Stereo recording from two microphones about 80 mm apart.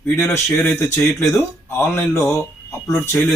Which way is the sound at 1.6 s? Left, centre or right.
Left.